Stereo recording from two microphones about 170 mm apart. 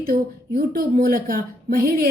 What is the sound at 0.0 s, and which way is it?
A woman's voice, 60° right (ahead or behind).